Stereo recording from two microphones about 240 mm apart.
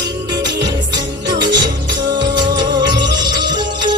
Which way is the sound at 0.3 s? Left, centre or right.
Centre.